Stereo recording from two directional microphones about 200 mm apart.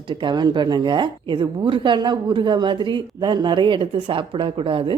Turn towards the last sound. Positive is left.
turn(degrees=-25)  # may be behind; listen again after turning